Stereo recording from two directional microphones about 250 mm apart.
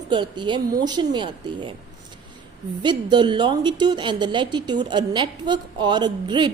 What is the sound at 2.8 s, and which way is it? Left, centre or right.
A woman's voice, centre.